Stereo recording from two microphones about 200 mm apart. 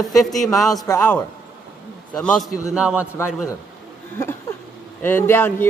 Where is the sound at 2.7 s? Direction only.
5° right (ahead or behind).